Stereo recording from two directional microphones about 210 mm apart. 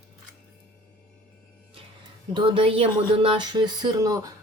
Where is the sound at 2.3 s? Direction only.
25° right (ahead or behind).